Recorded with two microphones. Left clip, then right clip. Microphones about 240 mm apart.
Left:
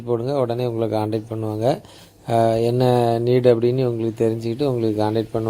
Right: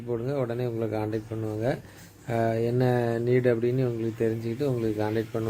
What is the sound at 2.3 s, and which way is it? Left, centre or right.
Speech, left.